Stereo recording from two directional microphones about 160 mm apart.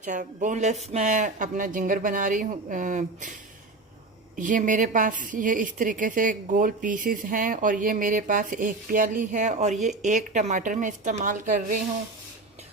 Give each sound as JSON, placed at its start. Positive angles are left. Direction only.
{"t": 0.0, "sound": "speech", "side_deg": -50}
{"t": 4.4, "sound": "a woman's voice", "side_deg": -55}